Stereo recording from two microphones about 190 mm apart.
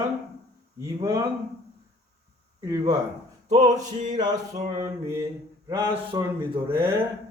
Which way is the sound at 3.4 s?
35° right (ahead or behind).